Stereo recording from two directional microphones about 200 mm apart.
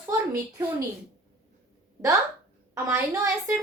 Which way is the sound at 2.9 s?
15° right (ahead or behind).